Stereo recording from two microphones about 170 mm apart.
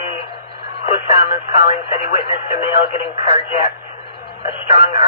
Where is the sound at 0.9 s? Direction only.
35° left (ahead or behind).